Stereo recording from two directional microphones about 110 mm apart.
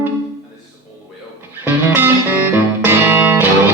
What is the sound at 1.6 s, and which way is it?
Music, 15° right (ahead or behind).